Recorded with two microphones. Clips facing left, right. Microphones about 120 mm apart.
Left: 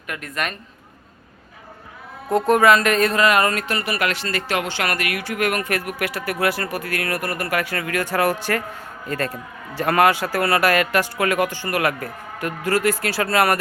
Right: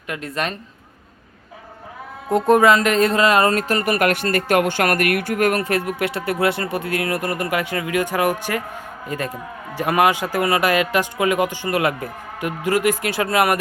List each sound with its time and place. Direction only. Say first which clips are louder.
0.1 s speech: right 2 dB; 30° right (ahead or behind)
2.3 s a man's voice: right 1 dB; 20° right (ahead or behind)